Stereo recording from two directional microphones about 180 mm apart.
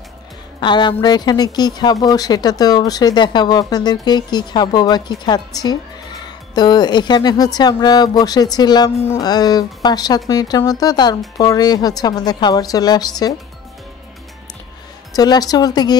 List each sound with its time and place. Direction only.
0.6 s speech: 25° left (ahead or behind)
15.1 s speech: 20° left (ahead or behind)